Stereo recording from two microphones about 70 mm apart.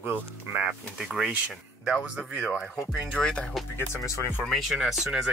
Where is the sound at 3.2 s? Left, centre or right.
Centre.